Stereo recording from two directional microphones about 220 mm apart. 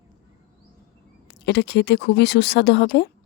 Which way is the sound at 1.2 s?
50° left (ahead or behind).